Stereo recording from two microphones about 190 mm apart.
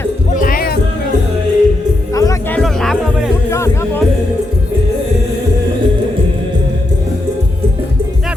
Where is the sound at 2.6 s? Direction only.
Centre (ahead or behind).